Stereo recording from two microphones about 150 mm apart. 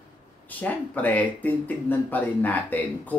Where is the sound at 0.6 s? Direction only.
10° left (ahead or behind).